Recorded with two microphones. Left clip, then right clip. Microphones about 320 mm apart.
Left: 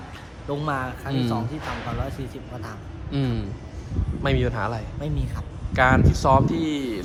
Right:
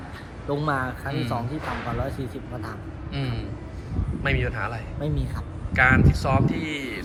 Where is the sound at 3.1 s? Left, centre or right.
Centre.